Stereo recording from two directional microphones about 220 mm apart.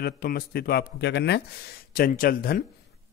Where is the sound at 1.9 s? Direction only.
40° left (ahead or behind).